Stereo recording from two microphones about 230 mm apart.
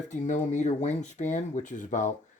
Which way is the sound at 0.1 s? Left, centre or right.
Left.